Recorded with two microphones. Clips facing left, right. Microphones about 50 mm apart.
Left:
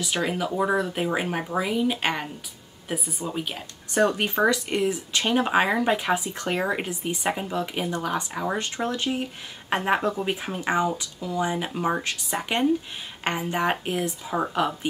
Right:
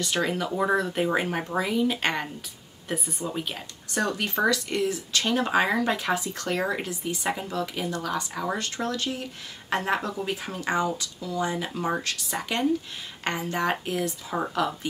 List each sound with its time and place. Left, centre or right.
0.0 s speech: centre
3.9 s speech: left